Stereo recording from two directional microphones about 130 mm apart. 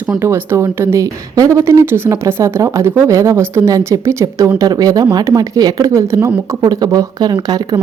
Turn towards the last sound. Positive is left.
turn(degrees=-30)  # may be behind; listen again after turning